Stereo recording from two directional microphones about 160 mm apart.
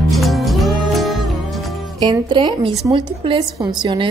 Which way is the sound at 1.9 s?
30° right (ahead or behind).